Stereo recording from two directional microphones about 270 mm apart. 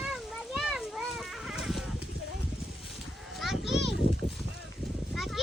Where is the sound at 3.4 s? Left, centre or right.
Centre.